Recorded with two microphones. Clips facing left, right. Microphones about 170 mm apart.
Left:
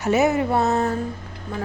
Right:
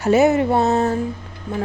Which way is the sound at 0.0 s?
30° right (ahead or behind).